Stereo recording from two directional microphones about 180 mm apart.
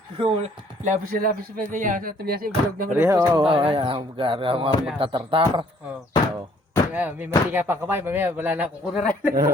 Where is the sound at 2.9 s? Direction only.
15° right (ahead or behind).